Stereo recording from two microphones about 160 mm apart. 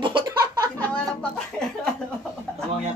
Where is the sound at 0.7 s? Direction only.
10° left (ahead or behind).